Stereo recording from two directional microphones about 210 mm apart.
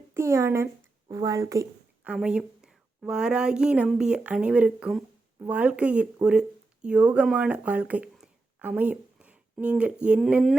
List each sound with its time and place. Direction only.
0.1 s speech: 15° right (ahead or behind)
2.0 s a woman's voice: 5° right (ahead or behind)